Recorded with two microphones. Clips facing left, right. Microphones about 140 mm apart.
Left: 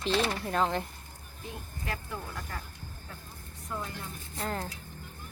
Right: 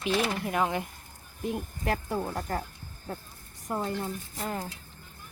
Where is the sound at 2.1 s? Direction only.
40° right (ahead or behind).